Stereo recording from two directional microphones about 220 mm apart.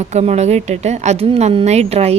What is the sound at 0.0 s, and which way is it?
A woman's voice, 30° right (ahead or behind).